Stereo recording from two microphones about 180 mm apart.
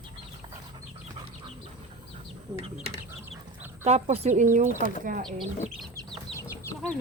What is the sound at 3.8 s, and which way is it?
Speech, 35° right (ahead or behind).